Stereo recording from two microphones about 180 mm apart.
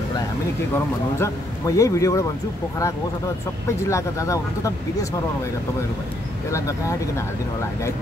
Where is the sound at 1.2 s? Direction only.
15° left (ahead or behind).